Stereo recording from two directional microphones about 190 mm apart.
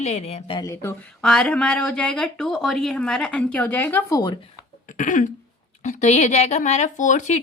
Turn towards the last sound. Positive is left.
turn(degrees=40)  # may be behind; listen again after turning